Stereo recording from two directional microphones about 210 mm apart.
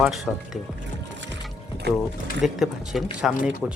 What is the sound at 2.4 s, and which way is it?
Speech, centre (ahead or behind).